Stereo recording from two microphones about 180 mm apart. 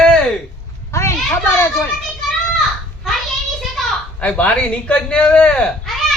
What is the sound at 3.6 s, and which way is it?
A woman's voice, 5° left (ahead or behind).